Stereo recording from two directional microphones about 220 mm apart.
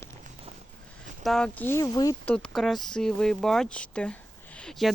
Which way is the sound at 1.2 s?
5° left (ahead or behind).